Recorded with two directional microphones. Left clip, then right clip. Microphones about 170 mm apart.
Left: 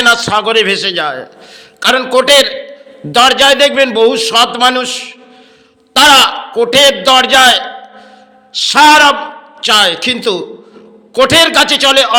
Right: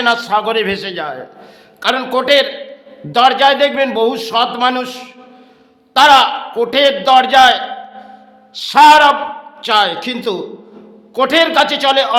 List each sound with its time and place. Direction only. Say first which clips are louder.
0.0 s a man's voice: left 4 dB; 10° left (ahead or behind)